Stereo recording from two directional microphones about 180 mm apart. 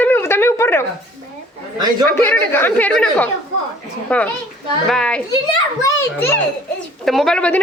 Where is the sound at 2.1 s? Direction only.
10° left (ahead or behind).